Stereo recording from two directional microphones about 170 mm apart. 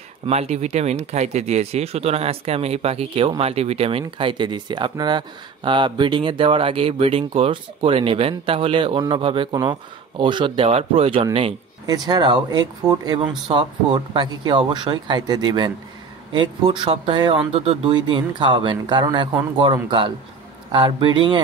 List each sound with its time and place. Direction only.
0.3 s speech: 40° right (ahead or behind)
11.8 s speech: 25° right (ahead or behind)